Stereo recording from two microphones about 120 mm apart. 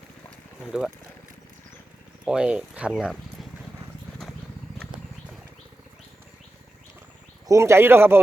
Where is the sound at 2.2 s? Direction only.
5° right (ahead or behind).